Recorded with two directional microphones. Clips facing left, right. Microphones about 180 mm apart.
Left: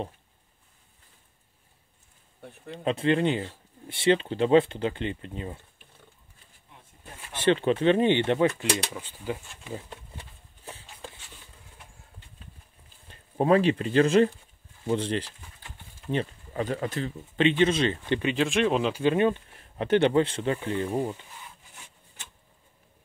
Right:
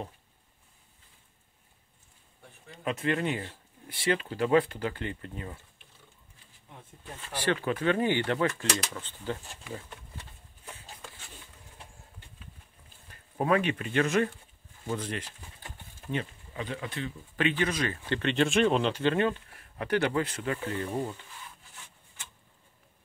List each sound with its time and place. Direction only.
2.7 s speech: 30° left (ahead or behind)
7.3 s speech: 25° left (ahead or behind)
8.9 s stir: 10° left (ahead or behind)
9.7 s a sound: 25° left (ahead or behind)
13.1 s speech: 30° left (ahead or behind)
16.5 s speech: 45° left (ahead or behind)
17.4 s speech: 25° left (ahead or behind)
18.2 s speech: centre (ahead or behind); by 20.7 s 30° left (ahead or behind)
20.7 s stir: 15° left (ahead or behind)